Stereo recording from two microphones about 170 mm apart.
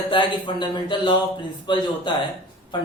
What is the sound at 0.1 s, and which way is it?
A man's voice, 30° left (ahead or behind).